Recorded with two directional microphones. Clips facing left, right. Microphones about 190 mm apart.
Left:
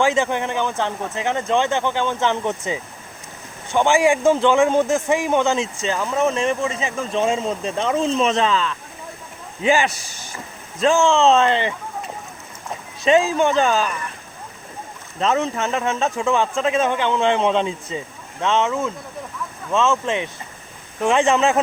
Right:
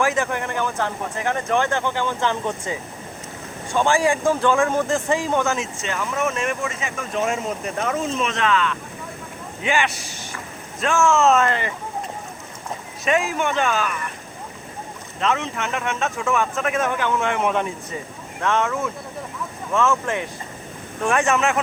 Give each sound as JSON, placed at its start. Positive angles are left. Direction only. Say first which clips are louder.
{"t": 0.0, "sound": "speech", "louder": "left 3 dB", "side_deg": 25}
{"t": 5.5, "sound": "speech", "louder": "left 4 dB", "side_deg": 30}
{"t": 13.1, "sound": "speech", "louder": "left 5 dB", "side_deg": 30}
{"t": 15.2, "sound": "speech", "louder": "left 3 dB", "side_deg": 35}
{"t": 21.2, "sound": "speech", "louder": "left 3 dB", "side_deg": 30}